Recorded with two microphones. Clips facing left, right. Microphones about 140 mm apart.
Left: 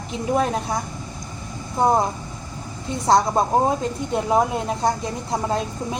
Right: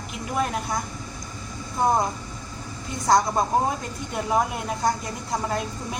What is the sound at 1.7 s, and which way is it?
Speech, 25° left (ahead or behind).